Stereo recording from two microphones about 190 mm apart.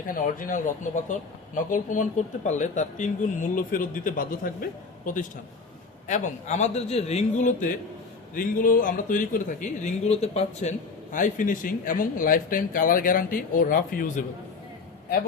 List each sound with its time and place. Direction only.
0.1 s a man's voice: 45° left (ahead or behind)